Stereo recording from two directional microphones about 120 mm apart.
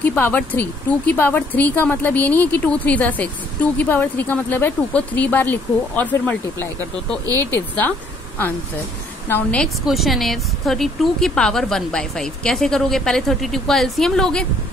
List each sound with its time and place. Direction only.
0.0 s speech: 15° left (ahead or behind)
9.3 s speech: 10° left (ahead or behind)
9.8 s speech: centre (ahead or behind)